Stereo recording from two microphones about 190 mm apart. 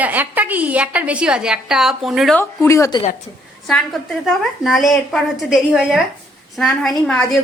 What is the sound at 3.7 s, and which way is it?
A woman's voice, centre (ahead or behind).